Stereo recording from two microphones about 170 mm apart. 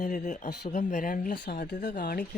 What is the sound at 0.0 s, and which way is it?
Speech, 45° left (ahead or behind).